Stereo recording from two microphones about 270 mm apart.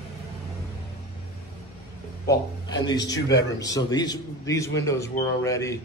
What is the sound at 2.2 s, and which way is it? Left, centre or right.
A man's voice, centre.